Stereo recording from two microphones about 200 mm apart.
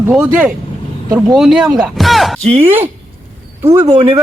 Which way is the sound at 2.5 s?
30° right (ahead or behind).